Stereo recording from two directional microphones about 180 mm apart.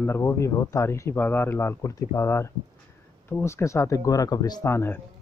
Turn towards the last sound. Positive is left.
turn(degrees=15)  # may be behind; listen again after turning